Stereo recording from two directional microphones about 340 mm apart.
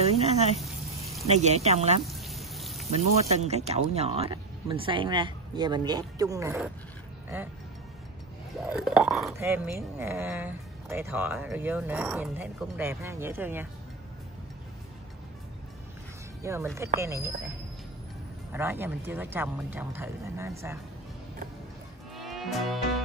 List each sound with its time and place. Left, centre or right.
0.0 s a sound: centre
1.2 s speech: centre
2.0 s a sound: centre
2.9 s speech: centre
8.5 s speech: centre
16.4 s speech: centre
18.5 s speech: centre
22.1 s music: centre